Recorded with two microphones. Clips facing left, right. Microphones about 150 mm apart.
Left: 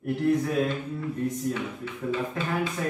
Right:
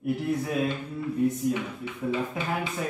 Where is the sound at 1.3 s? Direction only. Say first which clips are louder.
Right 2 dB; 10° right (ahead or behind).